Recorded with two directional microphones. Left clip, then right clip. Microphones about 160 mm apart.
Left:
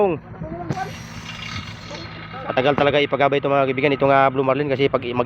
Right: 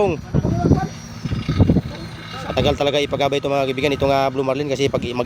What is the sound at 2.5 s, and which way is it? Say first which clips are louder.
Speech: left 1 dB; 10° right (ahead or behind).